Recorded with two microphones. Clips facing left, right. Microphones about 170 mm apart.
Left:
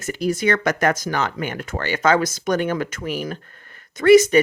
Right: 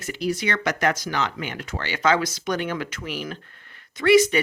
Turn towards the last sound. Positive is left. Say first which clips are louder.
# left 5 dB
turn(degrees=45)  # may be behind; listen again after turning